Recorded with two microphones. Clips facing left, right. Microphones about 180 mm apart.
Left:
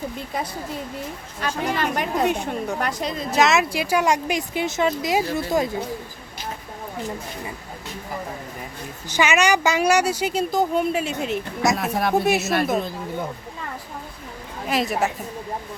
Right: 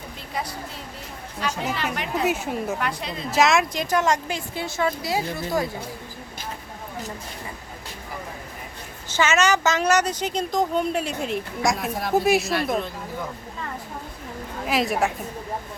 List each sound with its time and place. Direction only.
1.7 s a woman's voice: 45° left (ahead or behind)
2.2 s a woman's voice: 5° right (ahead or behind)
2.8 s a woman's voice: 40° left (ahead or behind)
3.3 s a woman's voice: centre (ahead or behind); by 5.6 s 20° left (ahead or behind)
9.0 s a woman's voice: 15° left (ahead or behind)
11.8 s speech: 65° left (ahead or behind)
12.1 s a woman's voice: centre (ahead or behind)
14.7 s a woman's voice: centre (ahead or behind)